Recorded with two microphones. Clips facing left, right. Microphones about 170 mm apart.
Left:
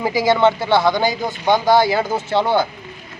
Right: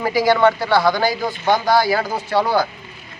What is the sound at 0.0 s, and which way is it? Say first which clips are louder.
Speech: even; 20° left (ahead or behind).